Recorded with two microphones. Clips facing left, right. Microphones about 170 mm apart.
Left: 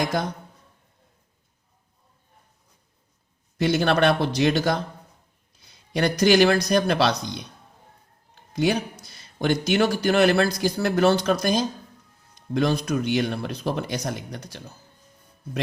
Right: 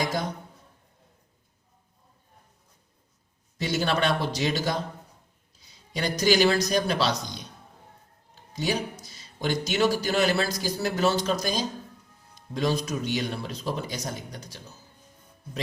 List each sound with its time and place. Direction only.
0.0 s speech: 60° left (ahead or behind)
3.6 s speech: 60° left (ahead or behind)
8.5 s speech: 60° left (ahead or behind)